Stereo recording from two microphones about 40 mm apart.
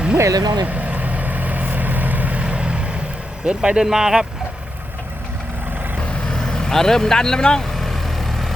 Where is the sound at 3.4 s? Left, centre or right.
Right.